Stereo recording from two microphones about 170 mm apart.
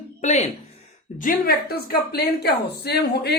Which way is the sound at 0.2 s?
40° left (ahead or behind).